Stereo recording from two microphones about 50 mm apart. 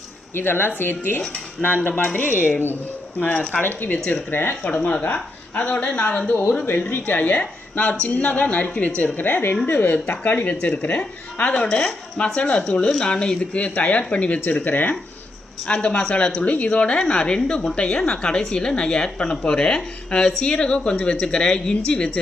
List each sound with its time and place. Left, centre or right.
0.3 s a woman's voice: left
2.0 s a woman's voice: left
3.2 s speech: left
3.6 s a woman's voice: left
3.9 s speech: left
4.3 s speech: left
4.6 s speech: left
6.7 s a woman's voice: left
9.1 s a woman's voice: left
15.6 s speech: centre